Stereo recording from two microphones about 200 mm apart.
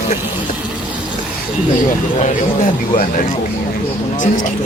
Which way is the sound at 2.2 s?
40° left (ahead or behind).